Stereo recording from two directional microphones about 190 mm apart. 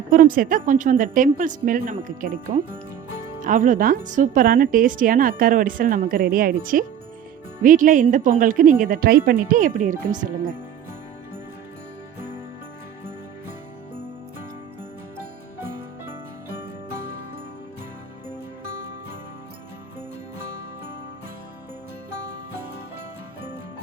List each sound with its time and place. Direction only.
0.1 s a woman's voice: 45° right (ahead or behind)
18.6 s music: 50° right (ahead or behind)